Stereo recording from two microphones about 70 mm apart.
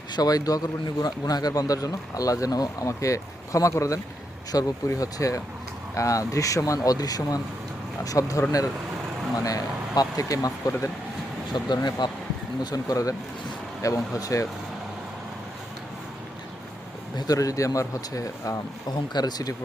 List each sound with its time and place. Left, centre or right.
0.1 s speech: left
4.5 s speech: left
9.4 s speech: left
10.7 s speech: left
11.5 s speech: left
12.7 s speech: left
17.3 s speech: left
18.9 s speech: left